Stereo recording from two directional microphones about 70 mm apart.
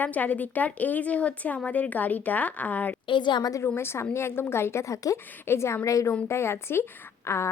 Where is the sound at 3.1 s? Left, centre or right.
Left.